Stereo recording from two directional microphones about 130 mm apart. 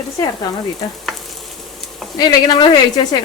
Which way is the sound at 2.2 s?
30° left (ahead or behind).